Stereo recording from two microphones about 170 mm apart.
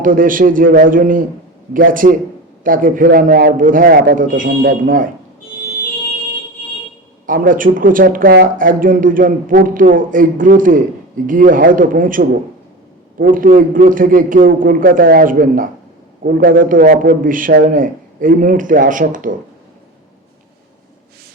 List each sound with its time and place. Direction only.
0.0 s speech: 55° right (ahead or behind)
7.3 s speech: 55° right (ahead or behind)